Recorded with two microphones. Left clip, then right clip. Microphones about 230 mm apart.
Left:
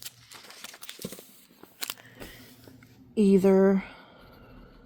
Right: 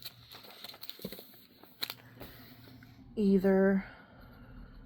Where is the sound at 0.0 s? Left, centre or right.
Left.